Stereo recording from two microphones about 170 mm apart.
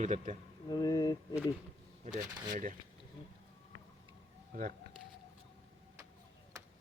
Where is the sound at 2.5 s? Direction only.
50° right (ahead or behind).